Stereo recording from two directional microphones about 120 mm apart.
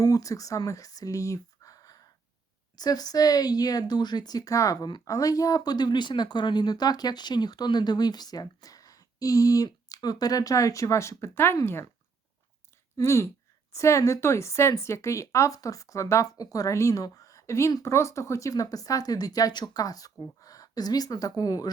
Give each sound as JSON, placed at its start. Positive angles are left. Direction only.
{"t": 0.0, "sound": "speech", "side_deg": 30}
{"t": 13.0, "sound": "a woman's voice", "side_deg": 25}